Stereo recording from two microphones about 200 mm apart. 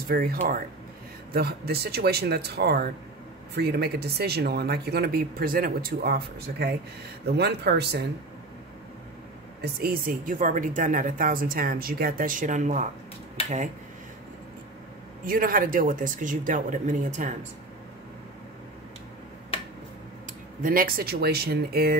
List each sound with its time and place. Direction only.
0.1 s speech: 50° right (ahead or behind)
9.8 s speech: 45° right (ahead or behind)
13.4 s speech: 30° left (ahead or behind)
15.2 s speech: 45° right (ahead or behind)
20.6 s speech: 45° right (ahead or behind)